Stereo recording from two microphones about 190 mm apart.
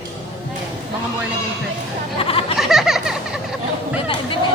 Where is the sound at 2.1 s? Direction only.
30° left (ahead or behind).